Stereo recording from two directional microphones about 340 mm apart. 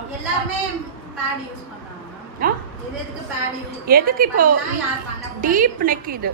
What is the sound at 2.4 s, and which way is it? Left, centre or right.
Speech, right.